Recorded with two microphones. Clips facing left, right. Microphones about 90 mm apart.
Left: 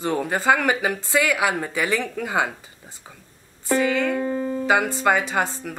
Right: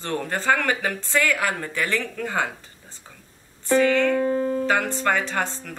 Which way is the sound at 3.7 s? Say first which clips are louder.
Right 2 dB; 10° left (ahead or behind).